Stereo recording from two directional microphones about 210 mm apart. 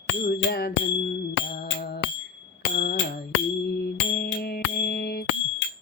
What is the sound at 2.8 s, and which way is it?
Music, 55° left (ahead or behind).